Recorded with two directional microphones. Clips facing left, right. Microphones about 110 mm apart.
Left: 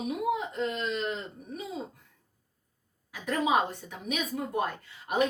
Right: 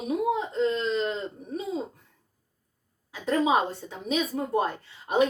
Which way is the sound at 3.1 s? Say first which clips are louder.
Right 3 dB; 25° right (ahead or behind).